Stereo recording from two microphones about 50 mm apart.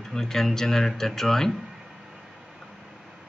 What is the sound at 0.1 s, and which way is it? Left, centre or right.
Speech, centre.